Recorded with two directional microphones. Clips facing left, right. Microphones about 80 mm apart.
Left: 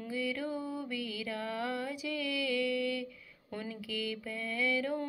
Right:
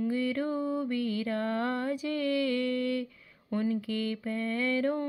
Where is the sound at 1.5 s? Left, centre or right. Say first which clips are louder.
Right 6 dB; right.